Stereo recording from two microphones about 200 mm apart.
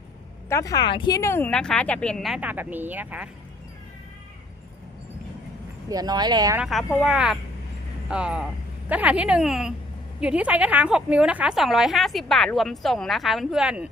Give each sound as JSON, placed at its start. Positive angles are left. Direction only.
{"t": 0.4, "sound": "a woman's voice", "side_deg": 15}
{"t": 5.9, "sound": "speech", "side_deg": -20}
{"t": 6.6, "sound": "a woman's voice", "side_deg": 0}